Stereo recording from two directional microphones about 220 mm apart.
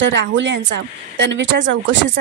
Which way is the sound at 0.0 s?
55° right (ahead or behind).